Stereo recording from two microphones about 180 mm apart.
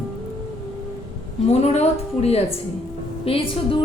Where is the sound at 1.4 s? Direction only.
35° left (ahead or behind).